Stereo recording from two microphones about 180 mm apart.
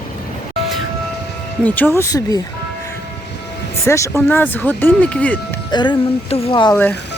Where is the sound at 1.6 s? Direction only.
10° left (ahead or behind).